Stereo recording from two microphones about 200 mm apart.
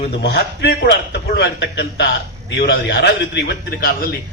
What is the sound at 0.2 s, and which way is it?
A man's voice, 55° left (ahead or behind).